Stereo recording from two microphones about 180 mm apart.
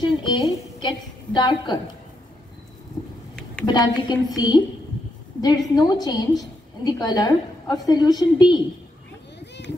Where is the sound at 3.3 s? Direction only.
5° left (ahead or behind).